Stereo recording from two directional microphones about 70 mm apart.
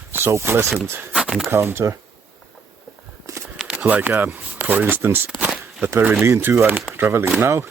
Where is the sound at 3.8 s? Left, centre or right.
Right.